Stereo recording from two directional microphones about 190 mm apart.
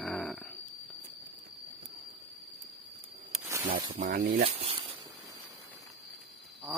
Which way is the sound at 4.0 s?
55° right (ahead or behind).